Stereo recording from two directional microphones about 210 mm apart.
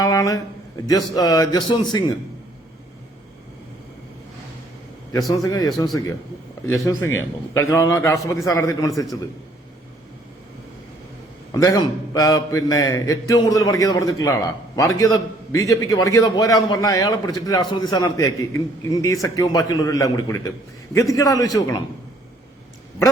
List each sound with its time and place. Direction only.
0.0 s a sound: 15° left (ahead or behind)
0.9 s a man's voice: 20° left (ahead or behind)
5.3 s a man's voice: 15° left (ahead or behind)
11.5 s a man's voice: 15° left (ahead or behind)